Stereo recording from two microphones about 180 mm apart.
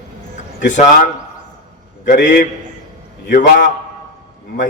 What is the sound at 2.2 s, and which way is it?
A man's voice, 45° left (ahead or behind).